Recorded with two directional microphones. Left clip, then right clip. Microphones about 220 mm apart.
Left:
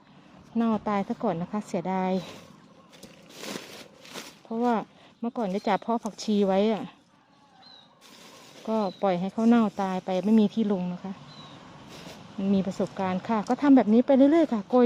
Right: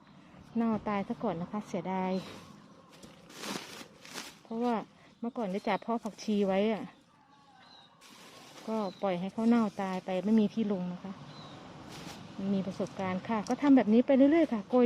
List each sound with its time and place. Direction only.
0.6 s speech: 10° left (ahead or behind)
4.4 s speech: 20° left (ahead or behind)
8.6 s speech: 20° left (ahead or behind)
12.5 s speech: 25° left (ahead or behind)